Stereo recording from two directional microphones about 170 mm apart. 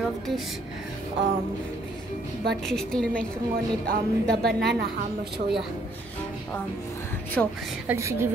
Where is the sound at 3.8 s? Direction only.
65° right (ahead or behind).